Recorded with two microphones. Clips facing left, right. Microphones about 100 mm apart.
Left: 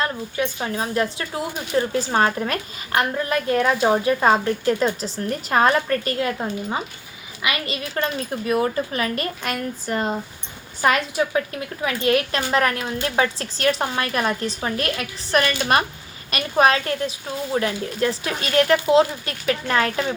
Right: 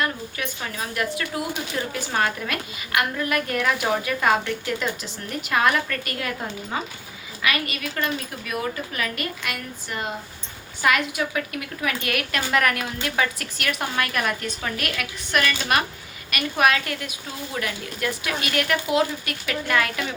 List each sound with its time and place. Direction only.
0.0 s a woman's voice: 30° left (ahead or behind)